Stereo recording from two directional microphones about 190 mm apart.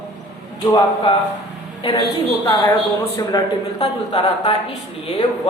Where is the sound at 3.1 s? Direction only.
20° left (ahead or behind).